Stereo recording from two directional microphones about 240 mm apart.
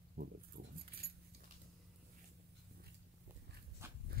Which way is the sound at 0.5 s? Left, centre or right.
Right.